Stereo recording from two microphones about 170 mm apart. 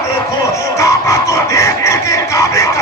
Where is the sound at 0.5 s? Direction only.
20° left (ahead or behind).